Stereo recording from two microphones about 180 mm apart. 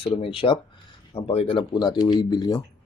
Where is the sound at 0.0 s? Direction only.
30° left (ahead or behind).